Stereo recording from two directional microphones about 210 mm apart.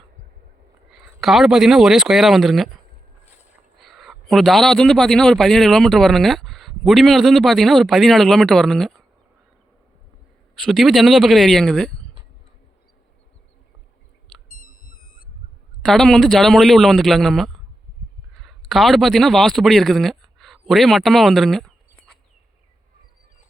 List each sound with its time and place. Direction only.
0.9 s a man's voice: centre (ahead or behind)
10.5 s a man's voice: centre (ahead or behind)
14.6 s a sound: 40° left (ahead or behind)
15.8 s a man's voice: centre (ahead or behind)